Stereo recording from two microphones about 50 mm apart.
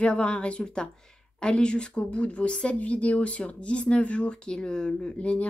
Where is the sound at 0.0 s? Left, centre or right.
Left.